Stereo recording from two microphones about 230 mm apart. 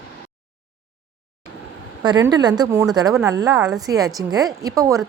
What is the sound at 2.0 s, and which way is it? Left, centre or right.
A woman's voice, centre.